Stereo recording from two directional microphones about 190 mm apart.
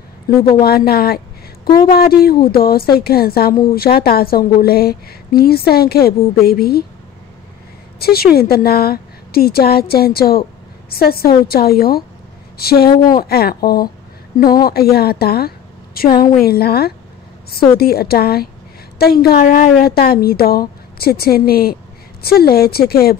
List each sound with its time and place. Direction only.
0.3 s a woman's voice: 55° left (ahead or behind)
8.0 s a woman's voice: 55° left (ahead or behind)